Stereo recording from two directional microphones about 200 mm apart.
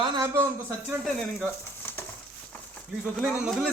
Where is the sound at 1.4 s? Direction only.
10° left (ahead or behind).